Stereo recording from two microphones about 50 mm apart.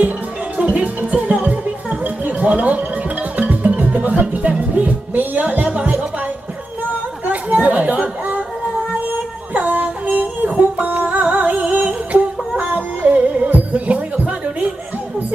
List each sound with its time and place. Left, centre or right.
0.6 s music: right
7.2 s chatter: right
9.1 s music: right